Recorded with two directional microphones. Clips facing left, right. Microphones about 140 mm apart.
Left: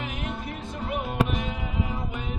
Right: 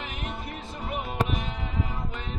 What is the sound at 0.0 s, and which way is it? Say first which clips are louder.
Music: left 3 dB; centre (ahead or behind).